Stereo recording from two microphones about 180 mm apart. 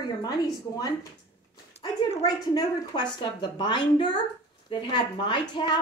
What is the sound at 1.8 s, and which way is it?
A woman's voice, 25° left (ahead or behind).